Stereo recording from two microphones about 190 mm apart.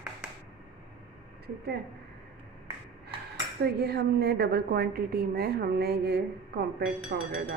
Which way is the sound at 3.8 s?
60° right (ahead or behind).